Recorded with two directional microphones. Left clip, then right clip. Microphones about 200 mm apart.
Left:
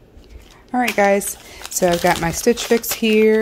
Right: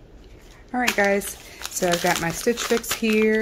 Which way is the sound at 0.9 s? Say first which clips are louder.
Left 8 dB; 35° left (ahead or behind).